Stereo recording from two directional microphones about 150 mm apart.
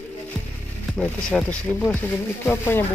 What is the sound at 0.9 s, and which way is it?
Speech, 5° left (ahead or behind).